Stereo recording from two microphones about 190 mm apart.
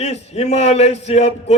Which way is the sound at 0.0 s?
35° left (ahead or behind).